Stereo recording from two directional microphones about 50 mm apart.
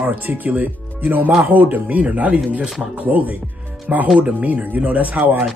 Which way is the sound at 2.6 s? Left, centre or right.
Centre.